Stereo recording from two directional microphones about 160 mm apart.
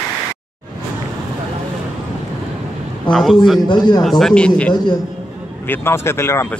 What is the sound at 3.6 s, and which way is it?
Speech, 25° left (ahead or behind).